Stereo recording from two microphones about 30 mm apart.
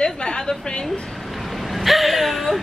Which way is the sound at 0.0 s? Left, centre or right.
Left.